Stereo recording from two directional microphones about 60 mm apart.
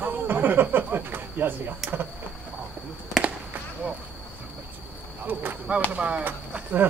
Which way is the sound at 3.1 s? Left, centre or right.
Centre.